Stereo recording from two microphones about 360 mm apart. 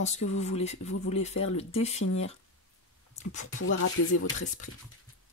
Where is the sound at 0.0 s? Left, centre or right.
Centre.